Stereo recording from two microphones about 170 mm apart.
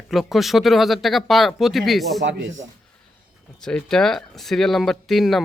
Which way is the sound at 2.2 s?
90° right.